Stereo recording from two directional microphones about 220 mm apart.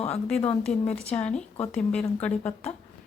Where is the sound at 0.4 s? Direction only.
5° left (ahead or behind).